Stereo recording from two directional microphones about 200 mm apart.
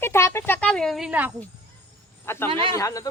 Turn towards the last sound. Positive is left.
turn(degrees=15)  # may be behind; listen again after turning